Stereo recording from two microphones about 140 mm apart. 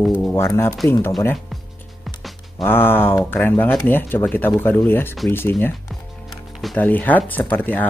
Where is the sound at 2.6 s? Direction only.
15° left (ahead or behind).